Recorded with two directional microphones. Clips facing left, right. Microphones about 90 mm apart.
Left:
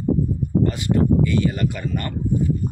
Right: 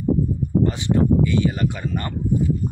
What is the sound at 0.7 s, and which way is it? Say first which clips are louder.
Speech: even; 25° right (ahead or behind).